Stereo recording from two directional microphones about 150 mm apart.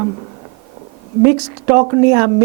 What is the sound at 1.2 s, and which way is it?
Speech, 20° right (ahead or behind).